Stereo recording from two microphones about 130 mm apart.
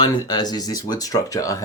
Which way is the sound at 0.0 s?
30° left (ahead or behind).